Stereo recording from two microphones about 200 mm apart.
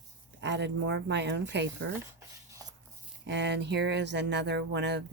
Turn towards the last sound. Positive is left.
turn(degrees=-60)  # may be behind; listen again after turning